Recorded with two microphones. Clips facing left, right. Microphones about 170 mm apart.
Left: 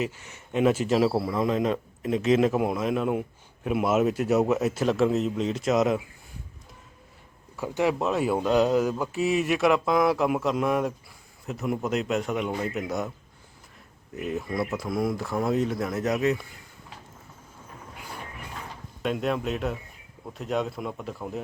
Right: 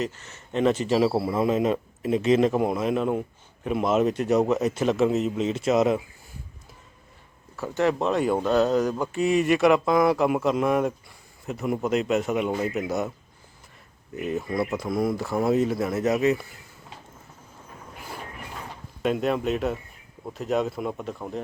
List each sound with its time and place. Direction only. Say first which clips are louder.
0.0 s a man's voice: even; 10° left (ahead or behind)
7.5 s a man's voice: right 1 dB; 15° left (ahead or behind); by 13.1 s 5° right (ahead or behind)
14.2 s a man's voice: right 2 dB; centre (ahead or behind)
19.0 s a man's voice: right 3 dB; centre (ahead or behind)